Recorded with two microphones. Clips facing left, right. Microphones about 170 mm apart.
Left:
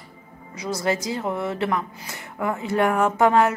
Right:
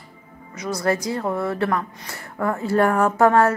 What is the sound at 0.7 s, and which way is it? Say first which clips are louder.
A woman's voice: right 2 dB; 25° left (ahead or behind).